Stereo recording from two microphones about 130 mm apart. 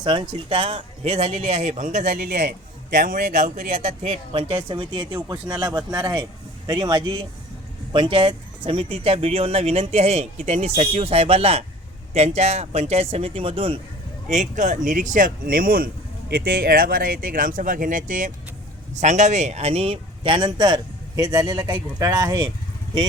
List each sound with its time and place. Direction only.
0.0 s speech: 35° right (ahead or behind); by 2.4 s 75° right (ahead or behind)
2.9 s speech: 90° right; by 4.5 s 50° right (ahead or behind)
4.7 s speech: 35° right (ahead or behind)
14.3 s speech: 70° right (ahead or behind); by 18.3 s 90° right
18.9 s speech: 65° right (ahead or behind); by 22.4 s 25° right (ahead or behind)